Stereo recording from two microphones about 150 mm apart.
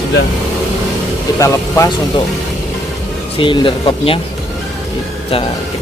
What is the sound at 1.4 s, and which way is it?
Speech, 20° left (ahead or behind).